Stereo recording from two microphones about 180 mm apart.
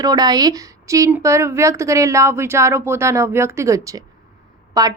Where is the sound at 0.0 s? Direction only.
20° right (ahead or behind).